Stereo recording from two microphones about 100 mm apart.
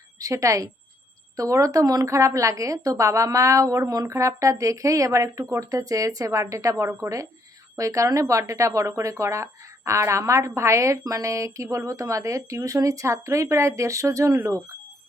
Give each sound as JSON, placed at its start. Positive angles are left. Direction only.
{"t": 0.2, "sound": "speech", "side_deg": -35}